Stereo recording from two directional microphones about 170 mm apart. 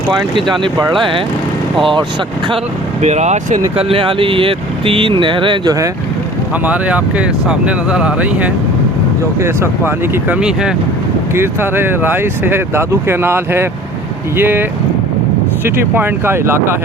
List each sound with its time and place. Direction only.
0.3 s speech: 30° right (ahead or behind)
3.0 s speech: 40° right (ahead or behind)
3.8 s speech: 35° right (ahead or behind)
6.7 s speech: 5° right (ahead or behind)